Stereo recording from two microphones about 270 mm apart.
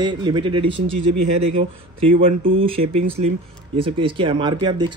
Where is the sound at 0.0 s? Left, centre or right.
Centre.